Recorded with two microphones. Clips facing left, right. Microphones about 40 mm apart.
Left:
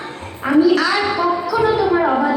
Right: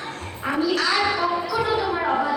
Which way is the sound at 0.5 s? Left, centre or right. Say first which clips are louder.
Left 8 dB; centre.